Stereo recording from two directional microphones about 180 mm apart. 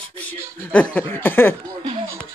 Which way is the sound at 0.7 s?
10° left (ahead or behind).